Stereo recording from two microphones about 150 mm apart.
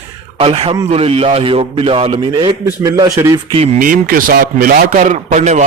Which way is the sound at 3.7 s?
65° right (ahead or behind).